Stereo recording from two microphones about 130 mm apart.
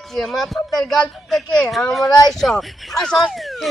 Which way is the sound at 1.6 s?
Centre (ahead or behind).